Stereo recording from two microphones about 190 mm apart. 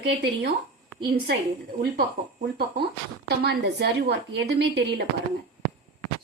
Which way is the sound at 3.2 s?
60° right (ahead or behind).